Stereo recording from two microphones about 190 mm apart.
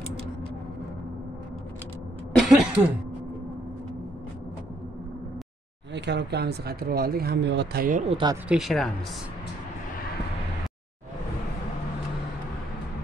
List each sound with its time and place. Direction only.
2.3 s a sound: 5° right (ahead or behind)
5.9 s speech: 65° right (ahead or behind)
8.1 s speech: 25° right (ahead or behind)
8.5 s speech: centre (ahead or behind)